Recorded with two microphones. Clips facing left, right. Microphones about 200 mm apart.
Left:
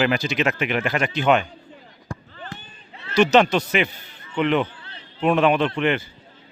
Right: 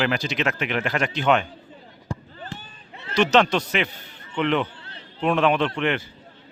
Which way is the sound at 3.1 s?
5° left (ahead or behind).